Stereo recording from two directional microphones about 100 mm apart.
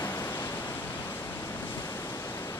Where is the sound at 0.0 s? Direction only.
25° left (ahead or behind).